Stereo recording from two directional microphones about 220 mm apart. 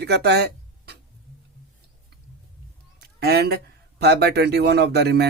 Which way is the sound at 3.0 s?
45° right (ahead or behind).